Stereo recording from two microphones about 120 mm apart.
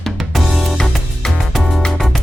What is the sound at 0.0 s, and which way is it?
Music, centre (ahead or behind).